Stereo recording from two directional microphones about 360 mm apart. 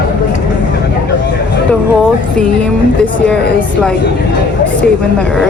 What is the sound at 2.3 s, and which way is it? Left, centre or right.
A woman's voice, centre.